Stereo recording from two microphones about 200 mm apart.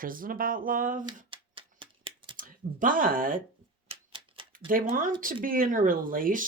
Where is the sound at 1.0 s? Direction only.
25° right (ahead or behind).